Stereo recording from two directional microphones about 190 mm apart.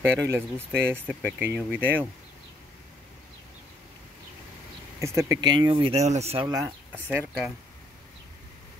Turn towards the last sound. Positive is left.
turn(degrees=-10)  # may be behind; listen again after turning